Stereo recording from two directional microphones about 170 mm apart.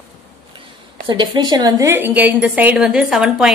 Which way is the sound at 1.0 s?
30° right (ahead or behind).